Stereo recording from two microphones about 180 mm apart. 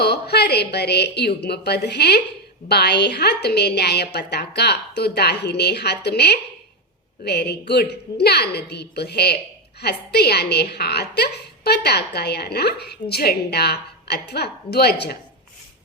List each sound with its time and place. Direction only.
0.0 s a woman's voice: 65° left (ahead or behind)